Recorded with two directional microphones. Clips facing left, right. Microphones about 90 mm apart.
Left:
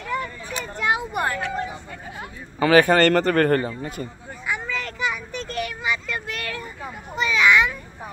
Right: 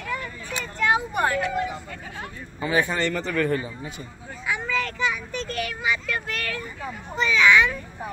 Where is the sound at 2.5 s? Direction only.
75° left (ahead or behind); by 4.0 s 55° left (ahead or behind).